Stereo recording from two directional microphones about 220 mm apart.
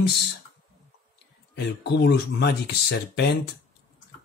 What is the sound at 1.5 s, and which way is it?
Speech, 50° left (ahead or behind).